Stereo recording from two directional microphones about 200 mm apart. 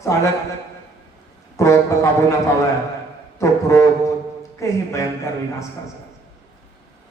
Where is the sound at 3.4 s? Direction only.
15° left (ahead or behind).